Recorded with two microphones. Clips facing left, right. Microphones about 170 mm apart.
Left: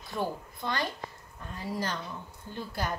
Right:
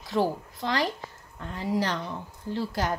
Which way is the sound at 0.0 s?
90° right.